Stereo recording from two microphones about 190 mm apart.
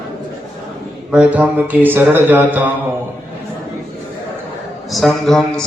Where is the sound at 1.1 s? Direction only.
10° right (ahead or behind).